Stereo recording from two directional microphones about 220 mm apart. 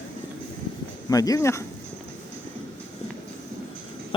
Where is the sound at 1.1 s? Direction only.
15° left (ahead or behind).